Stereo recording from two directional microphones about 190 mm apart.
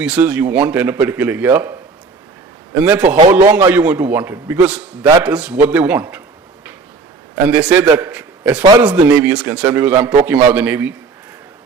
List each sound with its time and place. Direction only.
0.0 s a man's voice: 10° right (ahead or behind)
2.8 s a man's voice: 10° right (ahead or behind)
3.2 s a man's voice: 30° right (ahead or behind)
3.4 s a man's voice: 15° right (ahead or behind)
7.7 s a man's voice: 10° right (ahead or behind)